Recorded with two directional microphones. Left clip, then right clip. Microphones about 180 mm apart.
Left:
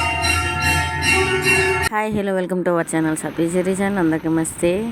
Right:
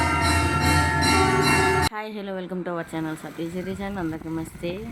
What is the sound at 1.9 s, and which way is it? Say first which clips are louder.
Speech: left 11 dB; 35° left (ahead or behind).